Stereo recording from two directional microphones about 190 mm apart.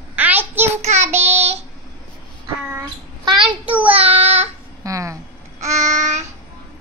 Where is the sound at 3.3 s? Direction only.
25° right (ahead or behind).